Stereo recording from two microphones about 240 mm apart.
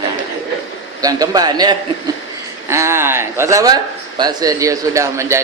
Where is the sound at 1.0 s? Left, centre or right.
Centre.